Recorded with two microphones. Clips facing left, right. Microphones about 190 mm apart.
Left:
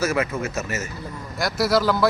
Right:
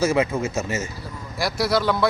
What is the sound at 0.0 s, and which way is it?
Speech, 30° right (ahead or behind).